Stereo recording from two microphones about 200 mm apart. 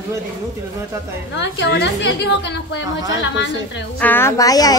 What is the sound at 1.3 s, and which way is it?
A woman's voice, 60° left (ahead or behind).